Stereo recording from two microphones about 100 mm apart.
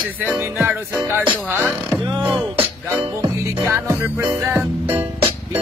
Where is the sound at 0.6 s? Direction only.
25° right (ahead or behind).